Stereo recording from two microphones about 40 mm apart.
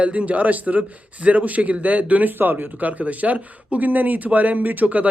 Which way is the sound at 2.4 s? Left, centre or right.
Right.